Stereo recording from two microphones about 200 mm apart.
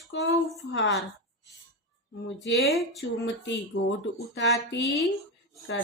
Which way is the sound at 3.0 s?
65° left (ahead or behind).